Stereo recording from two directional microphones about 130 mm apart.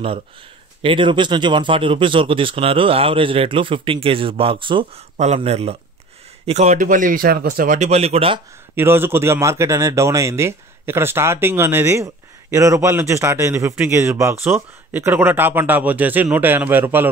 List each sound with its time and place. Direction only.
0.8 s speech: 40° right (ahead or behind)
5.1 s speech: 60° right (ahead or behind)
8.7 s speech: 15° right (ahead or behind)